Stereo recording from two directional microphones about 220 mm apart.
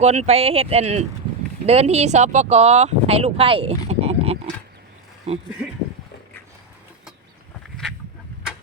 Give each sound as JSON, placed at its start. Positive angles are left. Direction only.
{"t": 0.0, "sound": "speech", "side_deg": -30}